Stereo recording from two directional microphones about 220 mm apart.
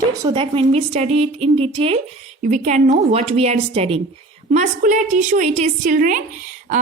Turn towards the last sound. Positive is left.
turn(degrees=-35)  # may be behind; listen again after turning